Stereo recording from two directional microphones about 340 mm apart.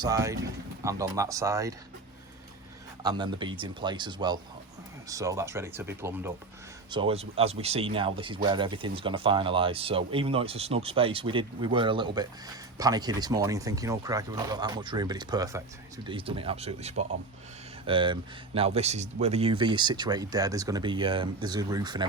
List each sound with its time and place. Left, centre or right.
0.0 s speech: centre
3.0 s speech: centre